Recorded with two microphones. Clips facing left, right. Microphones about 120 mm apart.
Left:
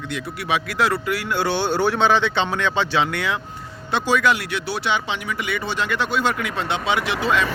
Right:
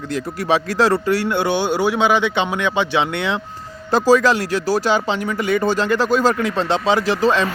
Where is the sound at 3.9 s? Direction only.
35° right (ahead or behind).